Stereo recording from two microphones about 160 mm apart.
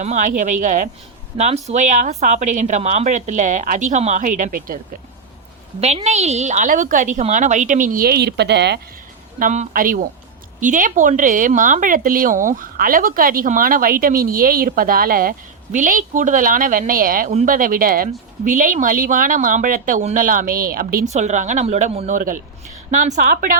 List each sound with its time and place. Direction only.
0.0 s a woman's voice: 50° right (ahead or behind)
1.4 s a woman's voice: 45° right (ahead or behind); by 4.8 s 60° right (ahead or behind)
5.8 s a woman's voice: 40° right (ahead or behind); by 8.8 s 90° right
9.4 s a woman's voice: 55° right (ahead or behind)